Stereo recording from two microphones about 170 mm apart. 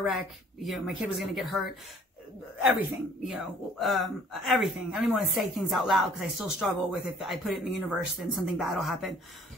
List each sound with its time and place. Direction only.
0.0 s speech: centre (ahead or behind)